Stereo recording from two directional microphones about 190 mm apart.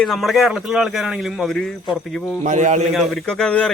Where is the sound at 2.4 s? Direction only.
40° right (ahead or behind).